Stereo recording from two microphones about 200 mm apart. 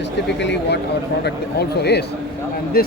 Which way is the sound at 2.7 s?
50° left (ahead or behind).